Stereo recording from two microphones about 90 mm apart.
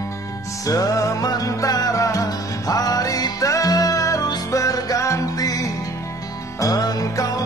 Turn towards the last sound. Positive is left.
turn(degrees=45)  # may be behind; listen again after turning